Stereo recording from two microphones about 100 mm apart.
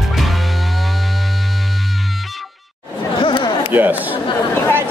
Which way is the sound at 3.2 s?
55° left (ahead or behind).